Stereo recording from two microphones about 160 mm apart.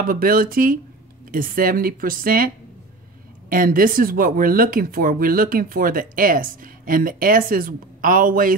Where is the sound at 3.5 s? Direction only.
60° right (ahead or behind).